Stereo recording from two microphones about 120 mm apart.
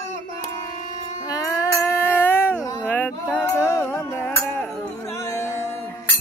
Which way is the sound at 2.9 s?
15° left (ahead or behind).